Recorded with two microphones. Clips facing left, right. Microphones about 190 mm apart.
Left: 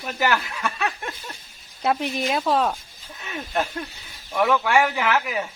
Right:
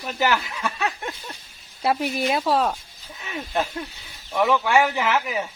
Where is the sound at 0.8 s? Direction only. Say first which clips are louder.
Right 1 dB; 20° right (ahead or behind).